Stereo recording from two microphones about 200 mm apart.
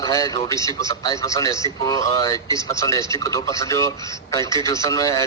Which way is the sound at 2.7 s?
15° left (ahead or behind).